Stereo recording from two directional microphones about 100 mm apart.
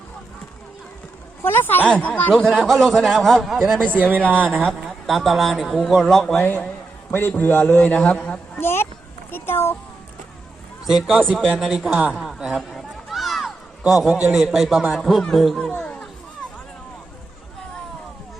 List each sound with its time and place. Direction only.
1.4 s a man's voice: 20° left (ahead or behind)
2.5 s a man's voice: centre (ahead or behind)
3.9 s speech: 20° right (ahead or behind)
4.9 s a man's voice: centre (ahead or behind)
6.3 s a man's voice: 15° left (ahead or behind)
8.5 s a sound: 25° left (ahead or behind)
9.3 s a child's voice: 25° left (ahead or behind)
10.8 s a man's voice: 5° right (ahead or behind)
11.2 s a man's voice: 5° left (ahead or behind)
11.9 s speech: 15° right (ahead or behind)
12.1 s a man's voice: 5° right (ahead or behind)
12.7 s run: centre (ahead or behind)
14.3 s a man's voice: 5° right (ahead or behind)